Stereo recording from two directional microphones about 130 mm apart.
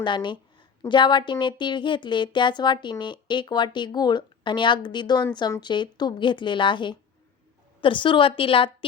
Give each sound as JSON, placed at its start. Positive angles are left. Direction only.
{"t": 0.0, "sound": "a woman's voice", "side_deg": 40}